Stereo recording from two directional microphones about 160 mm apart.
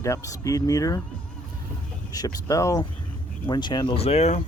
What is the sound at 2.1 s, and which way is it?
Speech, 20° left (ahead or behind).